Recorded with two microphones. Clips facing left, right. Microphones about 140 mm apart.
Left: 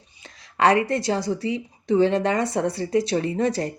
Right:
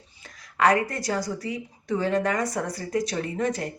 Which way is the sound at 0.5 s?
25° left (ahead or behind).